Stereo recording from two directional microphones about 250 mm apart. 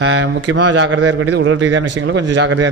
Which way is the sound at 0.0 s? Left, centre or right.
Right.